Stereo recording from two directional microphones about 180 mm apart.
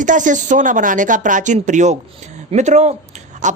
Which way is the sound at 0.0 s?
45° right (ahead or behind).